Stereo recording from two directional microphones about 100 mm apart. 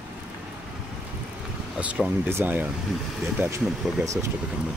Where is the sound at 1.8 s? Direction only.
10° right (ahead or behind).